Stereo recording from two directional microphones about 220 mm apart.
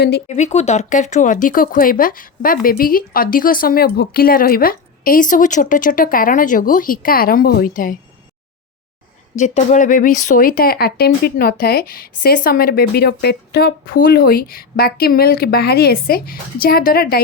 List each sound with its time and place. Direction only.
0.3 s speech: 30° left (ahead or behind)
9.4 s speech: 35° left (ahead or behind)